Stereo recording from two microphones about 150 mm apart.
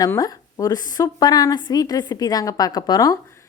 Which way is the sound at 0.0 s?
25° left (ahead or behind).